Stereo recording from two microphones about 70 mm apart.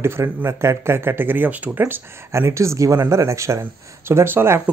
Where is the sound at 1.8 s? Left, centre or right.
Right.